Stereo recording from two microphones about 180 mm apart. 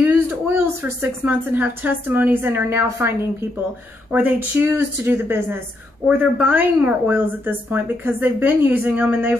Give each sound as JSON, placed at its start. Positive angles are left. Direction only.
{"t": 0.5, "sound": "a woman's voice", "side_deg": -10}